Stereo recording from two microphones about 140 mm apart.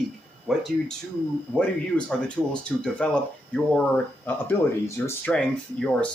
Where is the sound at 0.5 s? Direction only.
5° left (ahead or behind).